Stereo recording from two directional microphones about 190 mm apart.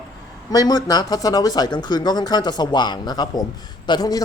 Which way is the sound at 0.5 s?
20° left (ahead or behind).